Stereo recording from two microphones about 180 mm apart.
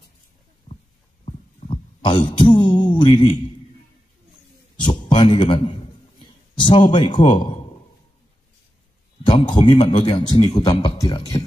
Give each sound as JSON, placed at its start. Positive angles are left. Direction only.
{"t": 1.2, "sound": "a sound", "side_deg": 30}
{"t": 4.7, "sound": "a man's voice", "side_deg": 25}
{"t": 9.2, "sound": "a man's voice", "side_deg": 30}